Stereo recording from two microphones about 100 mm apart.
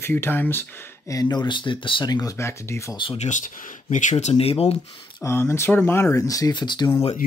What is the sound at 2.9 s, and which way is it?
Speech, 60° left (ahead or behind).